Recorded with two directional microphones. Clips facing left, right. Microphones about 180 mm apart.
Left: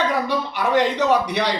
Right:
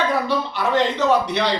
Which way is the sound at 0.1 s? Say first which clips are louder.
Right 1 dB; 15° left (ahead or behind).